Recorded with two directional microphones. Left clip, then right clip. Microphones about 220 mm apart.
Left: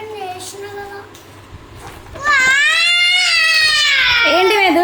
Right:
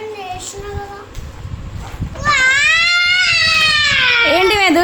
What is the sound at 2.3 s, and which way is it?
Baby cry, 10° right (ahead or behind).